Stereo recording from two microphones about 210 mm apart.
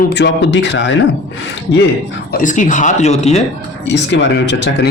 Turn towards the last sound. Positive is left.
turn(degrees=55)  # may be behind; listen again after turning